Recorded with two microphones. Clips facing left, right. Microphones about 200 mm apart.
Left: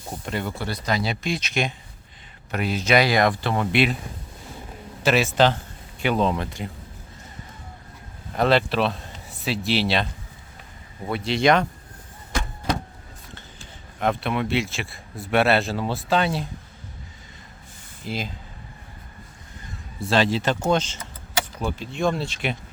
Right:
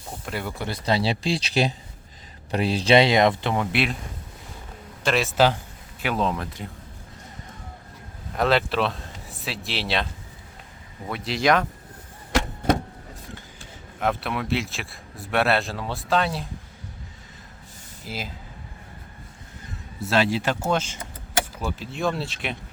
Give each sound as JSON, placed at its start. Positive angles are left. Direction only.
{"t": 0.3, "sound": "a man's voice", "side_deg": -5}
{"t": 0.5, "sound": "speech", "side_deg": -15}
{"t": 0.9, "sound": "speech", "side_deg": -30}
{"t": 5.0, "sound": "a man's voice", "side_deg": 0}
{"t": 8.4, "sound": "speech", "side_deg": 0}
{"t": 11.1, "sound": "a man's voice", "side_deg": 0}
{"t": 14.0, "sound": "a man's voice", "side_deg": 0}
{"t": 18.0, "sound": "a man's voice", "side_deg": -5}
{"t": 20.0, "sound": "a man's voice", "side_deg": -5}